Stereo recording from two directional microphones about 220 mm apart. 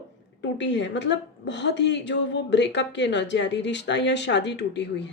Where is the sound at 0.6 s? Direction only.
55° left (ahead or behind).